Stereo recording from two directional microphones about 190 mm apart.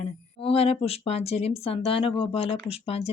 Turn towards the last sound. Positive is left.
turn(degrees=30)  # may be behind; listen again after turning